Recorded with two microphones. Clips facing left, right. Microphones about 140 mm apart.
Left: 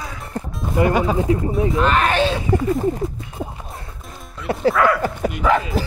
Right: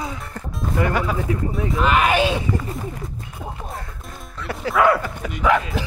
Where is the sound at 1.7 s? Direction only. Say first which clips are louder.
Right 1 dB; 5° right (ahead or behind).